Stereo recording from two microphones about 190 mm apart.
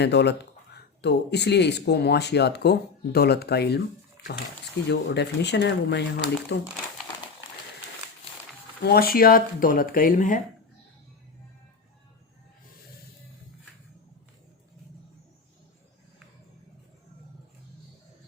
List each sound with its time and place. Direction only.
0.0 s speech: 60° left (ahead or behind)
8.8 s speech: 55° left (ahead or behind)